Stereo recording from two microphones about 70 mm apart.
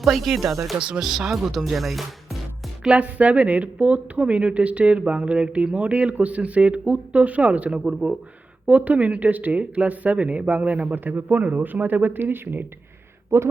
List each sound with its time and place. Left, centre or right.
0.0 s speech: centre
0.8 s speech: centre
1.0 s speech: centre
2.8 s a woman's voice: centre